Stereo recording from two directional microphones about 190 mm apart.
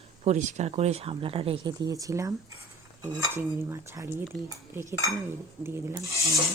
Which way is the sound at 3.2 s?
15° right (ahead or behind).